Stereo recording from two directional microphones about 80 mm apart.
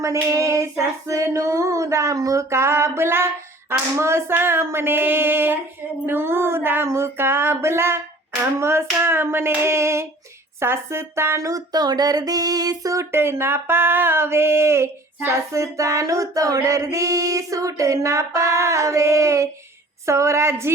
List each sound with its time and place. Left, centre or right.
0.0 s speech: right
3.7 s a sound: right
8.6 s speech: right